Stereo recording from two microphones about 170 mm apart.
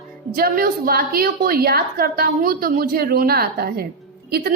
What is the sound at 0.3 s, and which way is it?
A woman's voice, 60° right (ahead or behind).